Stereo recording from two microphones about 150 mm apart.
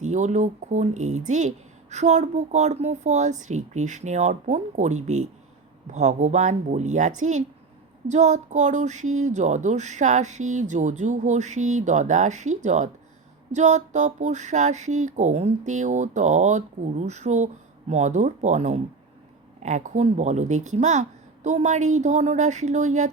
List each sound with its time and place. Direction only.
0.0 s speech: 50° right (ahead or behind)